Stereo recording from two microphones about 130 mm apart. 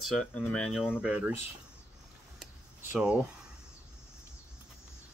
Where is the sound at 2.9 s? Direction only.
5° right (ahead or behind).